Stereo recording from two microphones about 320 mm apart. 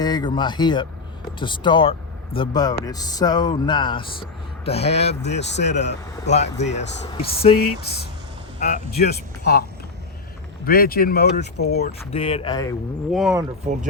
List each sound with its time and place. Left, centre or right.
0.0 s speech: centre
5.4 s speech: left
6.2 s speech: left
8.5 s speech: left
10.7 s speech: left
11.9 s speech: centre
13.1 s speech: centre
13.7 s speech: right